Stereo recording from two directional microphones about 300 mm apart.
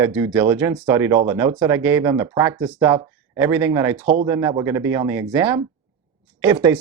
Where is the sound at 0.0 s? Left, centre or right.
Centre.